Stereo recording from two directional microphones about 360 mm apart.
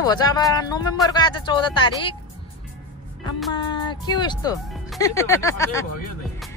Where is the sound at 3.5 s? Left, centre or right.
Centre.